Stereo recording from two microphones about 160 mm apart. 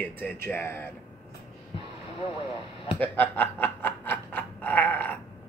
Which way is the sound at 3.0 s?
10° left (ahead or behind).